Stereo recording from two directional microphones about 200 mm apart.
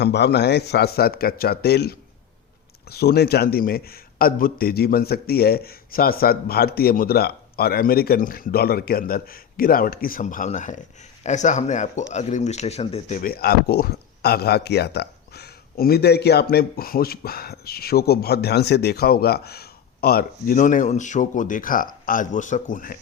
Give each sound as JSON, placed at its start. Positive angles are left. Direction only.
{"t": 0.0, "sound": "speech", "side_deg": 55}
{"t": 13.2, "sound": "speech", "side_deg": 50}